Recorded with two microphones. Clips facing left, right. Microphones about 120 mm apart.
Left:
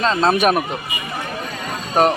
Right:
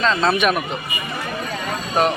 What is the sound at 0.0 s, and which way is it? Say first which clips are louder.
Speech: left 2 dB; 40° left (ahead or behind).